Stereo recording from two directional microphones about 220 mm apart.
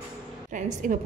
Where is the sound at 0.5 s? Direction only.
35° right (ahead or behind).